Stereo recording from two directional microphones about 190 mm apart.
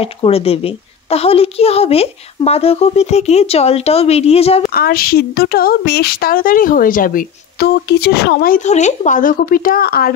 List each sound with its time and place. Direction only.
0.0 s a woman's voice: 30° left (ahead or behind)
4.6 s speech: 50° left (ahead or behind)